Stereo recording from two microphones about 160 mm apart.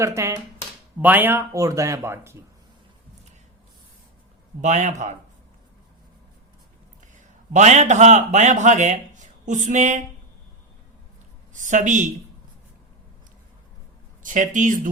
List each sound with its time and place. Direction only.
0.0 s speech: 20° right (ahead or behind)
4.6 s a man's voice: 45° right (ahead or behind)
7.5 s a man's voice: 45° right (ahead or behind)
11.5 s a man's voice: 50° right (ahead or behind)
14.2 s speech: 55° right (ahead or behind)